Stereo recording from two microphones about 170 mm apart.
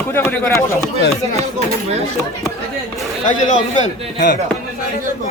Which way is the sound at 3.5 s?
45° left (ahead or behind).